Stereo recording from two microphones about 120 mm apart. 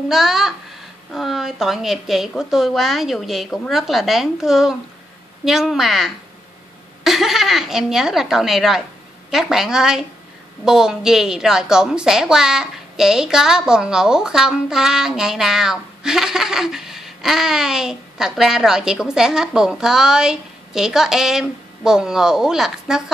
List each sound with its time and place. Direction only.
0.1 s a woman's voice: 5° right (ahead or behind)